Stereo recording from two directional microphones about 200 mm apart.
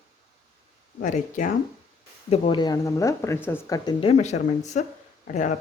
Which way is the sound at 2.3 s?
25° left (ahead or behind).